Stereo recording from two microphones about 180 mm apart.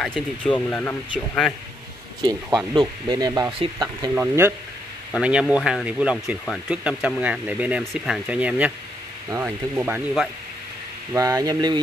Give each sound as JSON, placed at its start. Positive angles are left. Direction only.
{"t": 0.0, "sound": "speech", "side_deg": 5}
{"t": 2.2, "sound": "speech", "side_deg": -25}
{"t": 4.1, "sound": "speech", "side_deg": -10}
{"t": 11.1, "sound": "speech", "side_deg": -20}